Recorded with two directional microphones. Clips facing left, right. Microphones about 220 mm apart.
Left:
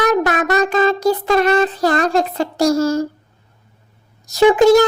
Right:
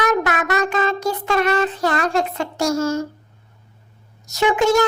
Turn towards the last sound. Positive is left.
turn(degrees=35)  # may be behind; listen again after turning